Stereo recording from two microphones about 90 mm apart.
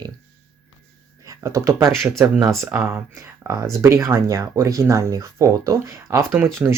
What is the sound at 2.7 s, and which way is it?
Speech, 25° right (ahead or behind).